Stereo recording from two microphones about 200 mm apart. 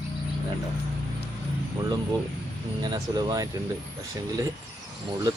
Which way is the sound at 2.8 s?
20° right (ahead or behind).